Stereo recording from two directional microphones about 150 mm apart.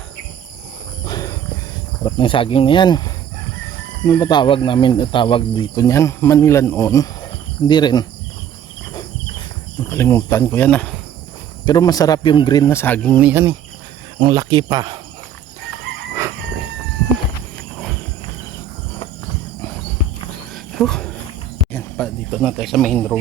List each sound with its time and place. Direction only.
1.0 s a sound: 25° left (ahead or behind)
2.0 s speech: 30° left (ahead or behind)
5.7 s speech: 20° left (ahead or behind)
9.9 s speech: 15° left (ahead or behind)
11.6 s speech: 25° left (ahead or behind)
12.6 s speech: 15° left (ahead or behind)
13.1 s speech: 10° right (ahead or behind)
14.2 s speech: 25° right (ahead or behind)
20.7 s a sound: 5° left (ahead or behind)
22.3 s a man's voice: centre (ahead or behind)